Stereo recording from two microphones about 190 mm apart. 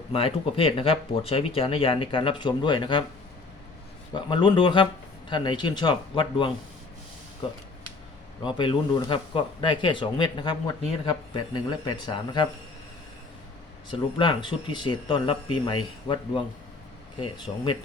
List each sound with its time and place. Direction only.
0.1 s speech: 30° left (ahead or behind)
4.1 s speech: 25° left (ahead or behind)
8.4 s speech: 25° left (ahead or behind)
13.9 s speech: 25° left (ahead or behind)